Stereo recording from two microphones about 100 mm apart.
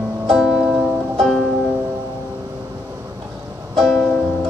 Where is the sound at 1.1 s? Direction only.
5° left (ahead or behind).